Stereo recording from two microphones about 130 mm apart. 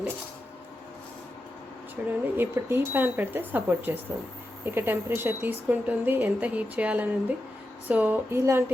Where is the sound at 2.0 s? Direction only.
10° right (ahead or behind).